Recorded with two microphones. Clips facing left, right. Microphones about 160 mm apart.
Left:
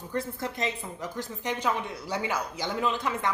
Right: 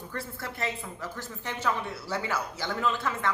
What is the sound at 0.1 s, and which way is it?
A woman's voice, 20° left (ahead or behind).